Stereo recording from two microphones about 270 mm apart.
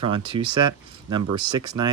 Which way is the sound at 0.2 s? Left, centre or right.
Centre.